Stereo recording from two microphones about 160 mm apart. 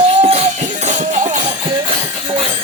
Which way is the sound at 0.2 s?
40° right (ahead or behind).